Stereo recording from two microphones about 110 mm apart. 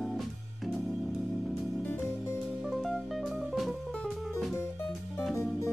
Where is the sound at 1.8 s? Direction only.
20° left (ahead or behind).